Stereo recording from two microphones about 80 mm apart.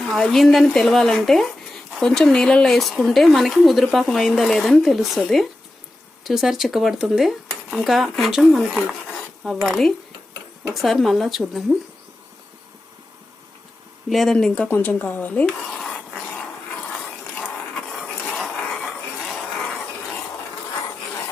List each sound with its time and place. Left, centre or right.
0.0 s speech: centre
10.8 s speech: centre
14.1 s speech: centre
14.7 s a woman's voice: left
15.4 s a sound: centre
18.3 s a sound: centre